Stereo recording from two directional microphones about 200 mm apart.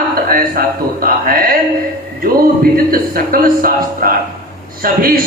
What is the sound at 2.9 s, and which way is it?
A man's voice, 45° right (ahead or behind).